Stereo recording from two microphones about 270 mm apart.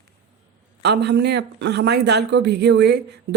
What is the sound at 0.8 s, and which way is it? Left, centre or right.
Speech, right.